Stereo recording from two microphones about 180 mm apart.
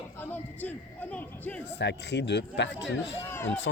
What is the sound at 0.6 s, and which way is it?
Speech, 10° left (ahead or behind).